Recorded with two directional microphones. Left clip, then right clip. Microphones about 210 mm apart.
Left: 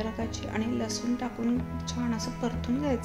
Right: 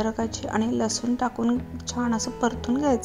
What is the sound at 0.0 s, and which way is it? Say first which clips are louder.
Speech: right 7 dB; 30° right (ahead or behind).